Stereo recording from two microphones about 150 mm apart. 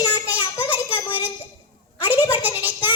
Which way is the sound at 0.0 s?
30° left (ahead or behind).